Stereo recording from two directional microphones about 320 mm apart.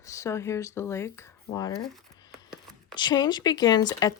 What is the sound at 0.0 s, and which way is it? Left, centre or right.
Speech, centre.